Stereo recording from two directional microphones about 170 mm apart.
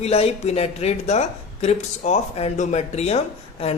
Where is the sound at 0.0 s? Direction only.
40° left (ahead or behind).